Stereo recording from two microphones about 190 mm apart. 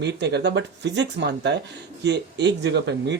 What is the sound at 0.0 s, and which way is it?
Speech, 65° right (ahead or behind).